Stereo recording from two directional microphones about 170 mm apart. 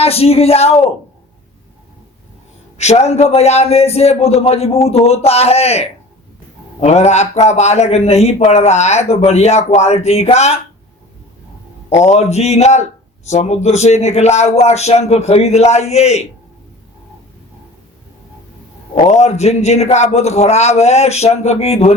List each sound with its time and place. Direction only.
0.0 s a man's voice: 35° left (ahead or behind)
2.7 s a man's voice: 40° left (ahead or behind)
11.9 s a man's voice: 40° left (ahead or behind)
18.9 s a man's voice: 40° left (ahead or behind)